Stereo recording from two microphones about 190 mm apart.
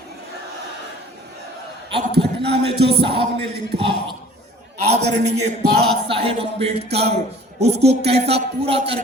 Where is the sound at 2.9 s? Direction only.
60° right (ahead or behind).